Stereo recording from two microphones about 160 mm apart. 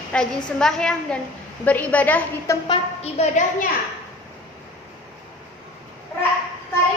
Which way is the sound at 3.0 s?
45° left (ahead or behind).